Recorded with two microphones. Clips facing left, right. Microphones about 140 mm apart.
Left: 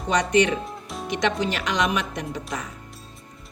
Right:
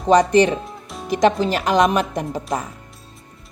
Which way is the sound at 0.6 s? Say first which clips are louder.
Even; centre (ahead or behind).